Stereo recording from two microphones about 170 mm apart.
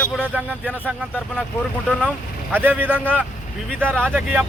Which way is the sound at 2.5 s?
10° right (ahead or behind).